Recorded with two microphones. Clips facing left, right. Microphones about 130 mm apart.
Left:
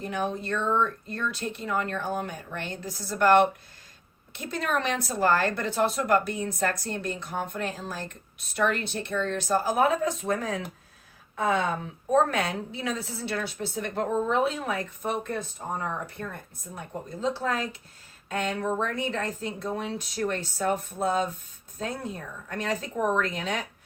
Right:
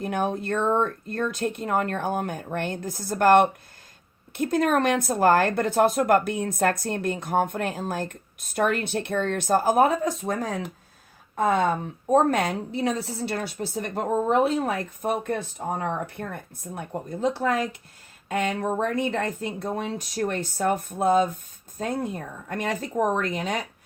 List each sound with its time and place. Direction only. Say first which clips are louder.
0.0 s speech: right 4 dB; 55° right (ahead or behind)
11.3 s speech: right 4 dB; 45° right (ahead or behind)